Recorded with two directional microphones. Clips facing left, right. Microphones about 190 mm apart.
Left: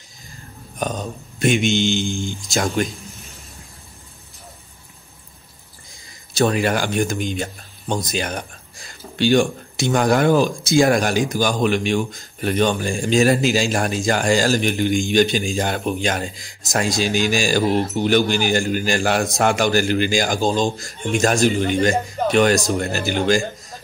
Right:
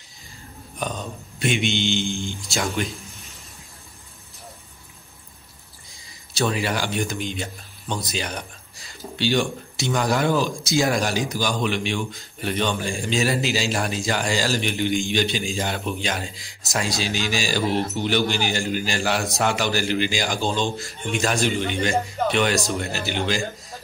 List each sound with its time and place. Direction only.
0.7 s speech: 45° left (ahead or behind)
6.3 s speech: 50° left (ahead or behind)